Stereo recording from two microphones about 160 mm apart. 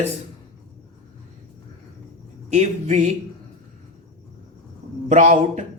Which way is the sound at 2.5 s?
45° right (ahead or behind).